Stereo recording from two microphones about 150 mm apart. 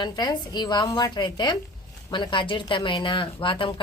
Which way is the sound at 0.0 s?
25° left (ahead or behind).